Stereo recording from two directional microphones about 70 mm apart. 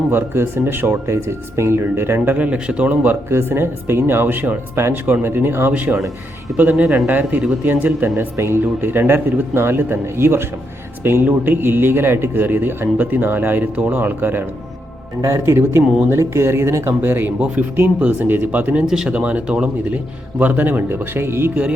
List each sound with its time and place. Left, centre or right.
0.1 s speech: right
2.3 s a man's voice: centre
3.2 s a man's voice: right
15.2 s speech: right
17.1 s a man's voice: right
18.9 s speech: centre
19.1 s a man's voice: centre; by 21.5 s right